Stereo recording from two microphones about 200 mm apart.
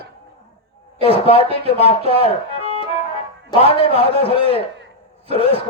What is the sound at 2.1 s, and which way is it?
Music, 25° left (ahead or behind).